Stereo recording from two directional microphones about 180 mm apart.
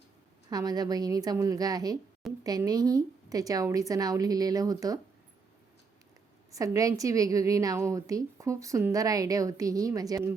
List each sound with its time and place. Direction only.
0.5 s a woman's voice: 20° right (ahead or behind)
6.5 s a woman's voice: 20° right (ahead or behind)